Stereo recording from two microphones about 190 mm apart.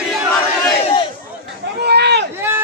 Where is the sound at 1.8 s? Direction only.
60° right (ahead or behind).